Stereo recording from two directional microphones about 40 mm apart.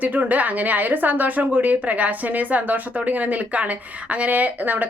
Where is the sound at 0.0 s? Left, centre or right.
Right.